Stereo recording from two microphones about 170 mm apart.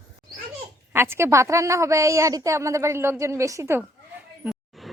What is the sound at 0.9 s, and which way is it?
A woman's voice, 15° right (ahead or behind).